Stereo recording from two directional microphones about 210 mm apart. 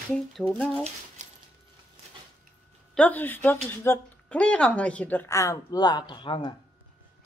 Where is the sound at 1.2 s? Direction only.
35° right (ahead or behind).